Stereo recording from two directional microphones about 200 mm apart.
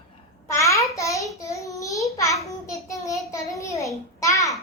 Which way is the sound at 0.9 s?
15° left (ahead or behind).